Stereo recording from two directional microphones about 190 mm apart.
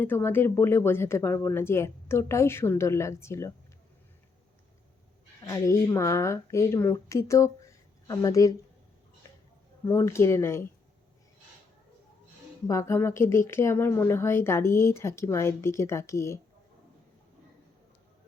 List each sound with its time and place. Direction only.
0.0 s a woman's voice: 10° left (ahead or behind)
5.5 s a woman's voice: 15° left (ahead or behind)
9.8 s a woman's voice: 15° left (ahead or behind)
12.6 s a woman's voice: 15° left (ahead or behind)